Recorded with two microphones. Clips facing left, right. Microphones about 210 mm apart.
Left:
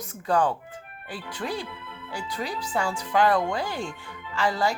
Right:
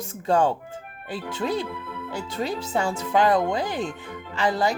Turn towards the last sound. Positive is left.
turn(degrees=-20)  # may be behind; listen again after turning